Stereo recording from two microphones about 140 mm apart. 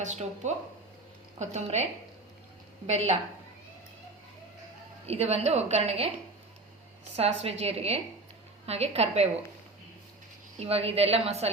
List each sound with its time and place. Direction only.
0.0 s a woman's voice: 55° right (ahead or behind)
5.0 s a woman's voice: 50° right (ahead or behind)
7.2 s a woman's voice: 45° right (ahead or behind)
10.6 s a woman's voice: 45° right (ahead or behind)